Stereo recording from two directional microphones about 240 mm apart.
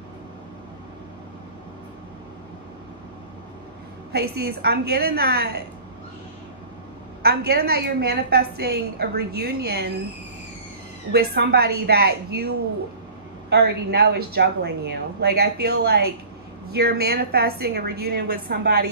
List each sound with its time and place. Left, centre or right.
4.1 s a woman's voice: right
7.2 s a woman's voice: right
11.1 s a woman's voice: right